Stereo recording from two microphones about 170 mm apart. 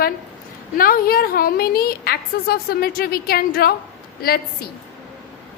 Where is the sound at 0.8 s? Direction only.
60° left (ahead or behind).